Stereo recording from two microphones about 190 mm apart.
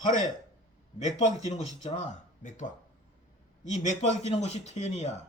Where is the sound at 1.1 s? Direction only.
40° left (ahead or behind).